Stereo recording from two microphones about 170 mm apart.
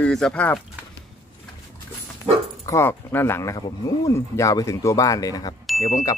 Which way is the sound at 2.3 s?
35° right (ahead or behind).